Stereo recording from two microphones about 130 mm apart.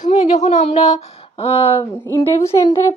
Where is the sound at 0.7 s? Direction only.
55° left (ahead or behind).